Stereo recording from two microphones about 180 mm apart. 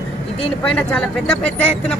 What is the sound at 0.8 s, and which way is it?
Speech, 5° left (ahead or behind).